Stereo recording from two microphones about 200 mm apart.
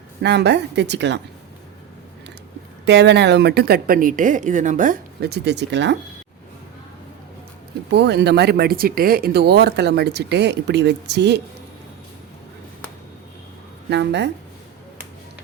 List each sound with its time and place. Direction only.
0.2 s speech: 60° right (ahead or behind)
2.8 s speech: 60° right (ahead or behind)
7.9 s speech: 60° right (ahead or behind)
13.9 s speech: 60° right (ahead or behind)